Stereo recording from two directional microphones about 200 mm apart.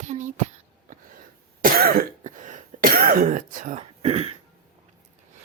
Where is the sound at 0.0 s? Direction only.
40° right (ahead or behind).